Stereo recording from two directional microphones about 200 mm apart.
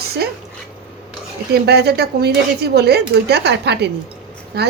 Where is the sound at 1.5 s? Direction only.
55° right (ahead or behind).